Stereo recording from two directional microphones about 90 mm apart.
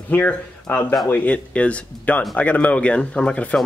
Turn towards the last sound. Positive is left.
turn(degrees=15)  # may be behind; listen again after turning